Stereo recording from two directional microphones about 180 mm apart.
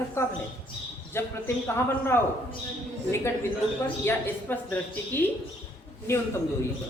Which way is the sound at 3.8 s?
10° left (ahead or behind).